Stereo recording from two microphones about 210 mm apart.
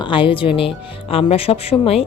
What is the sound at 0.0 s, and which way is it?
Speech, 25° left (ahead or behind).